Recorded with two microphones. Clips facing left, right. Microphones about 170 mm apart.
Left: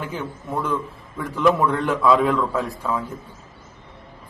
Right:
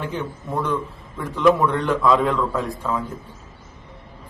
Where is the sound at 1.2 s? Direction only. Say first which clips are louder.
Right 2 dB; centre (ahead or behind).